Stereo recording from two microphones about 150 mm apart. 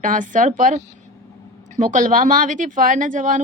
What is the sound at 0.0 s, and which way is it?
Speech, 60° right (ahead or behind).